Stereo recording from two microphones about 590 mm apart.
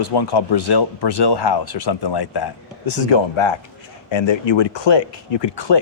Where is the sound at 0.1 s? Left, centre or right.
Left.